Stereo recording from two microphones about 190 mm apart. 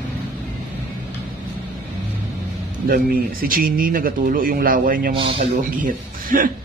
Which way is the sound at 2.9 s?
50° right (ahead or behind).